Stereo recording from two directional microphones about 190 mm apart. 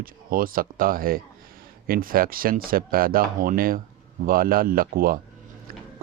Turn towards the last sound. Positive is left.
turn(degrees=-50)  # may be behind; listen again after turning